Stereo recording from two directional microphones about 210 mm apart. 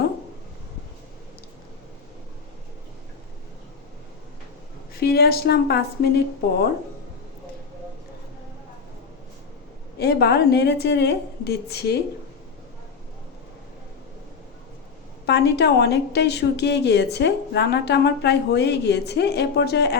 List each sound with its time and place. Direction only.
4.9 s a woman's voice: 50° left (ahead or behind)
10.0 s a woman's voice: 50° left (ahead or behind)
15.3 s a woman's voice: 50° left (ahead or behind)